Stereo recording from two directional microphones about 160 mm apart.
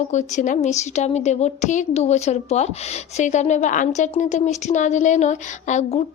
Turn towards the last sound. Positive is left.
turn(degrees=45)  # may be behind; listen again after turning